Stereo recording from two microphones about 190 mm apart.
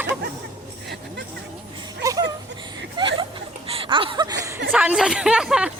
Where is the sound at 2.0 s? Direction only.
20° right (ahead or behind).